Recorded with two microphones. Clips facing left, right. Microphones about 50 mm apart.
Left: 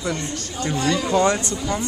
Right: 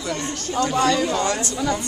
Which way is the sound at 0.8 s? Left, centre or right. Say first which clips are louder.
Left 1 dB; left.